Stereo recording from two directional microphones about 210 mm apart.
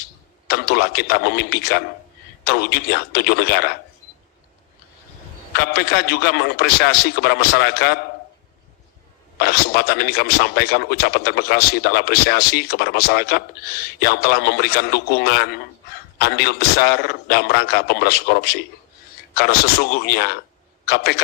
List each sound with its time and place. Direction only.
0.4 s a man's voice: 50° left (ahead or behind)
5.5 s a man's voice: 50° left (ahead or behind)
9.4 s a man's voice: 50° left (ahead or behind)